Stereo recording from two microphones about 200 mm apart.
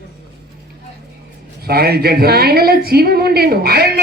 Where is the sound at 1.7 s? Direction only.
50° right (ahead or behind).